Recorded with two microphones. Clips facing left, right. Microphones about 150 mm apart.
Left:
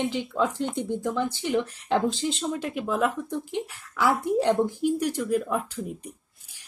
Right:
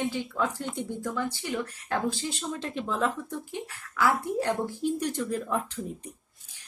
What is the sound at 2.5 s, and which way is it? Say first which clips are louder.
Speech: left 4 dB; 10° left (ahead or behind).